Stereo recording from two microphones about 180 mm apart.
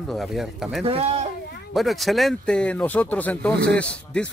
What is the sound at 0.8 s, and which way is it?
Speech, 35° right (ahead or behind).